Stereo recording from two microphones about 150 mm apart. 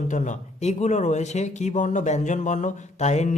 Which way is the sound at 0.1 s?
55° left (ahead or behind).